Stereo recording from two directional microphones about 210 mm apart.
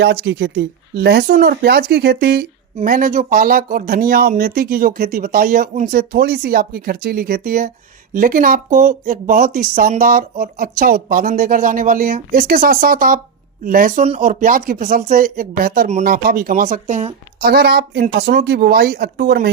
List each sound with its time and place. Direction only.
0.0 s speech: 50° right (ahead or behind); by 17.2 s 35° right (ahead or behind)
17.4 s speech: 50° right (ahead or behind)